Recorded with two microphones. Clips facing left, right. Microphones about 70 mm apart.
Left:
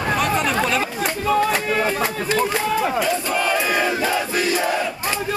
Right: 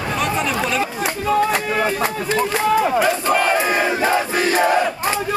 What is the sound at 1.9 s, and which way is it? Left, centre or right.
Speech, centre.